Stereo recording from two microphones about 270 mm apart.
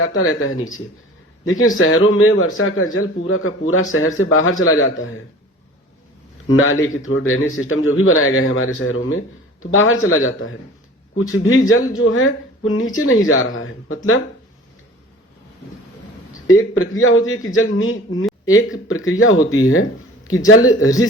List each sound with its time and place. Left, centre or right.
0.2 s speech: left
6.5 s speech: left
16.5 s speech: left